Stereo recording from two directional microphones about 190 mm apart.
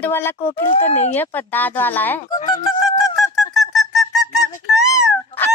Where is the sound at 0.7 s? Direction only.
35° left (ahead or behind).